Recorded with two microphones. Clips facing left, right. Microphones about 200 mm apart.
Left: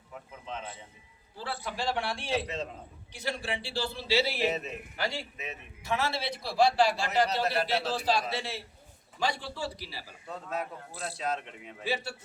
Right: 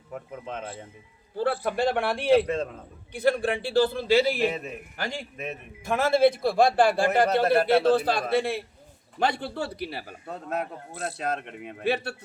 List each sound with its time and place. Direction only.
0.1 s a man's voice: 55° right (ahead or behind)